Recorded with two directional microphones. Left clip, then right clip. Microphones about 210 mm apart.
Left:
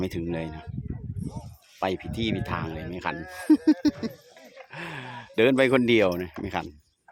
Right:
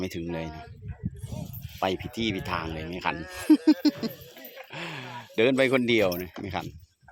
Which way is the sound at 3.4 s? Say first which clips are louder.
Even; centre (ahead or behind).